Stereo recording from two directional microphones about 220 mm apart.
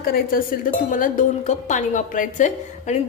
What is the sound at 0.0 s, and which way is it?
A woman's voice, 40° left (ahead or behind).